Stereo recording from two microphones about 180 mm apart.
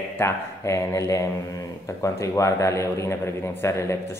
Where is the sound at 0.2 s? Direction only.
15° left (ahead or behind).